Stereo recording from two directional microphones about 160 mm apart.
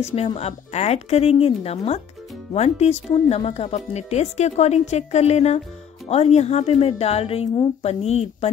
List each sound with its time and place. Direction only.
0.1 s speech: 40° left (ahead or behind)